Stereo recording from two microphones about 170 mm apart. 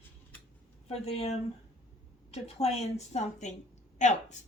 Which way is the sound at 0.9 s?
40° left (ahead or behind).